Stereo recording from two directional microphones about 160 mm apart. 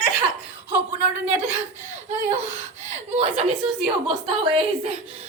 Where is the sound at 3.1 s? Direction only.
40° right (ahead or behind).